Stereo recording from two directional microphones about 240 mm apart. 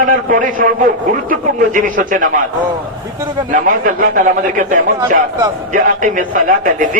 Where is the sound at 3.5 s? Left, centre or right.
Right.